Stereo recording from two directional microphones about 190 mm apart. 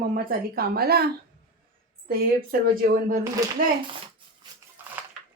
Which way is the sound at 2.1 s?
50° right (ahead or behind).